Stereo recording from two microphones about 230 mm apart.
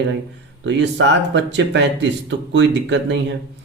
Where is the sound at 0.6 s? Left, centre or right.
Right.